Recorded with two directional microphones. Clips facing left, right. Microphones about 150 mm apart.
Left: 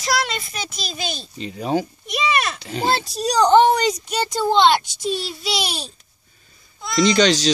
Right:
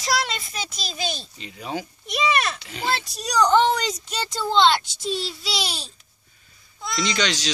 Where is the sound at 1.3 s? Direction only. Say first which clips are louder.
Left 9 dB; 35° left (ahead or behind).